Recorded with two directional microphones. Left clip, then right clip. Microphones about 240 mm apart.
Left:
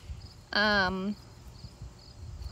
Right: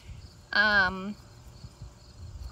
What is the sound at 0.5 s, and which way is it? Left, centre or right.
Speech, centre.